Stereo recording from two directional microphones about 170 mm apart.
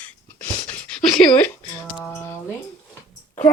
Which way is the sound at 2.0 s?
10° left (ahead or behind).